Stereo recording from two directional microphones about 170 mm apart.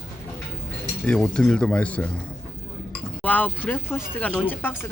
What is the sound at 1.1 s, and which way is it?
Speech, 5° left (ahead or behind).